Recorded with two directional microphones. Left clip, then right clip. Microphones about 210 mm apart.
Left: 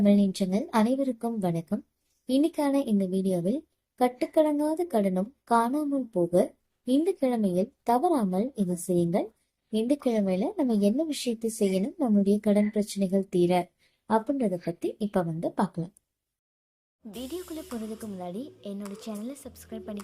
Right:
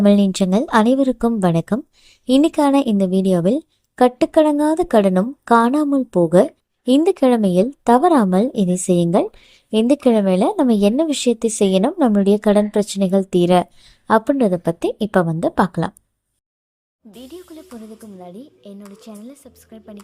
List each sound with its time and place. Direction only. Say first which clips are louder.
0.0 s a woman's voice: right 10 dB; 40° right (ahead or behind)
17.1 s a child's voice: even; centre (ahead or behind)